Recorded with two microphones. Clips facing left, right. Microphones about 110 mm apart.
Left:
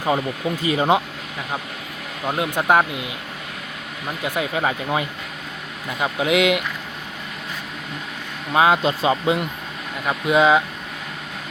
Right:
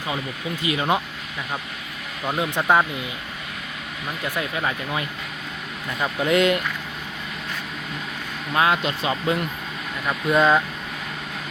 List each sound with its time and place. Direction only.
0.6 s speech: 30° left (ahead or behind)
2.2 s speech: 5° left (ahead or behind)
4.2 s speech: 20° left (ahead or behind)
5.9 s speech: 10° left (ahead or behind)
8.5 s speech: 25° left (ahead or behind)